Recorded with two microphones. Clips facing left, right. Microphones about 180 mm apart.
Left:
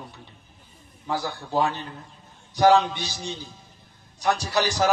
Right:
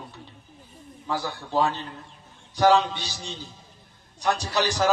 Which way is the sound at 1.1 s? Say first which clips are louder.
Left 1 dB; 15° left (ahead or behind).